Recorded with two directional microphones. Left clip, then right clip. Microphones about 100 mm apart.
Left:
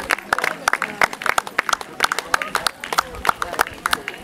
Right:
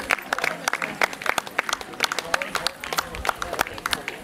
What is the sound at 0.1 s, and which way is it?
Applause, 25° left (ahead or behind).